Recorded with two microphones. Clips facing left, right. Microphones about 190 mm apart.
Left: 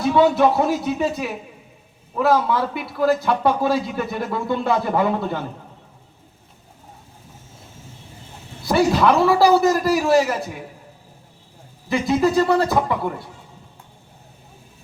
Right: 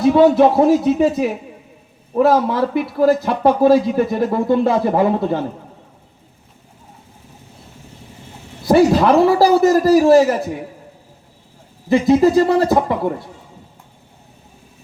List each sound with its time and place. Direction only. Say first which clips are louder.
0.1 s a man's voice: right 4 dB; 35° right (ahead or behind)
8.6 s a man's voice: right 5 dB; 45° right (ahead or behind)
12.2 s speech: right 4 dB; 40° right (ahead or behind)
12.7 s speech: right 4 dB; 25° right (ahead or behind)